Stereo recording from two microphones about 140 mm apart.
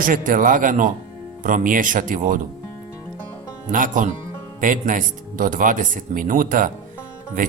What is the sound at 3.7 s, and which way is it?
Speech, 70° right (ahead or behind).